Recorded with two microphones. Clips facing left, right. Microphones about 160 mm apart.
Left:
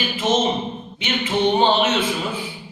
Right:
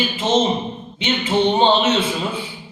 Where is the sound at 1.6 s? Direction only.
30° right (ahead or behind).